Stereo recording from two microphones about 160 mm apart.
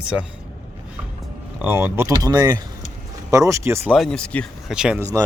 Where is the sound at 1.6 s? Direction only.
10° right (ahead or behind).